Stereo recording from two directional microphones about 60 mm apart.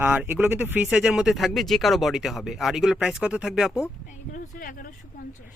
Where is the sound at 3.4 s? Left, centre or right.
Centre.